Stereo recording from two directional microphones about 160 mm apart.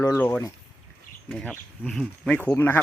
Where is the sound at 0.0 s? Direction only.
15° left (ahead or behind).